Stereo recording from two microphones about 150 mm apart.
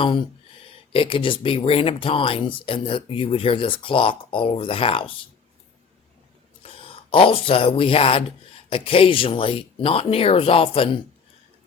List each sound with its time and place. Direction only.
0.0 s speech: 35° left (ahead or behind)
6.6 s speech: 35° left (ahead or behind)